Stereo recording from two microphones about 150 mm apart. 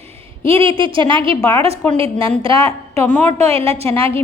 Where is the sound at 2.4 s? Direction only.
35° right (ahead or behind).